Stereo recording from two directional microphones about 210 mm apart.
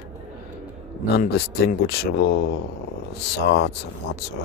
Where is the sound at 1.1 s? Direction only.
45° left (ahead or behind).